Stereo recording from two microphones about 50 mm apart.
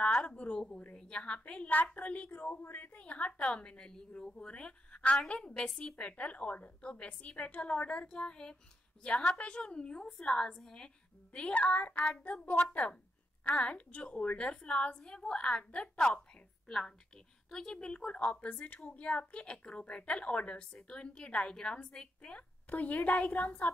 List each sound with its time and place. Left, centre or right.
0.1 s a sound: left
0.9 s a woman's voice: centre
11.3 s a woman's voice: left